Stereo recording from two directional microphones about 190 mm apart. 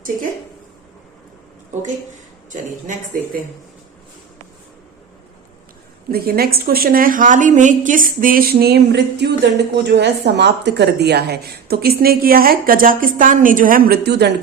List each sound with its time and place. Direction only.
6.1 s a woman's voice: 50° right (ahead or behind)